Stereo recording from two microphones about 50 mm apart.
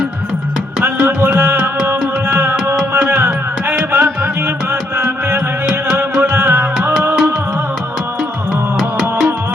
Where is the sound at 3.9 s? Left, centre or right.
Right.